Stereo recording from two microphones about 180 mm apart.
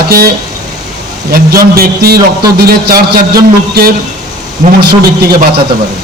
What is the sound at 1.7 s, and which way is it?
Speech, 55° right (ahead or behind).